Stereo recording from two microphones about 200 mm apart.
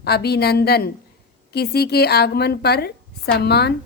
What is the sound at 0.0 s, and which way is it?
Speech, 55° left (ahead or behind).